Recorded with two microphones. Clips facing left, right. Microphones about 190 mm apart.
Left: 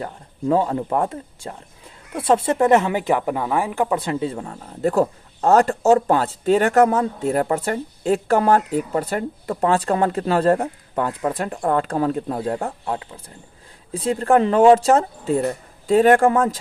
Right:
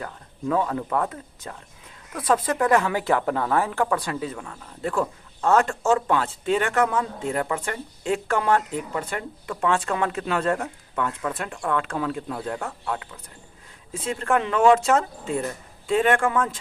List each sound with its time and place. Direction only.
0.0 s speech: 30° left (ahead or behind)